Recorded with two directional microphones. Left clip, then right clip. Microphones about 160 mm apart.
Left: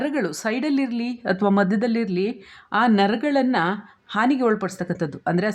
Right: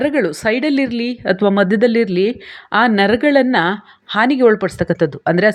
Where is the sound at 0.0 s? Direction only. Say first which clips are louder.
Right 8 dB; 20° right (ahead or behind).